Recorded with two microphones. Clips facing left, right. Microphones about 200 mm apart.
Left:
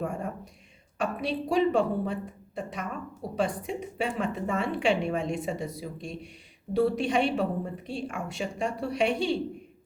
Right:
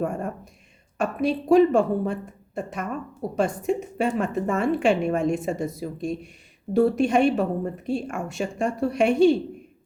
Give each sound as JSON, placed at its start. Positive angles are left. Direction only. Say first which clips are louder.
{"t": 0.9, "sound": "a woman's voice", "louder": "right 6 dB", "side_deg": -50}